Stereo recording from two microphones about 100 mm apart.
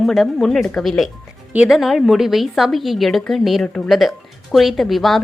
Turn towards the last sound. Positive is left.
turn(degrees=0)  # may be behind; listen again after turning